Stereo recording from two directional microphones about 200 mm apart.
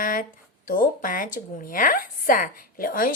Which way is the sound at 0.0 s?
40° left (ahead or behind).